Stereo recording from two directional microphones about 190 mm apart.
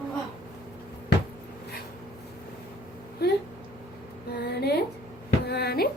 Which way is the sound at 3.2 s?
55° left (ahead or behind).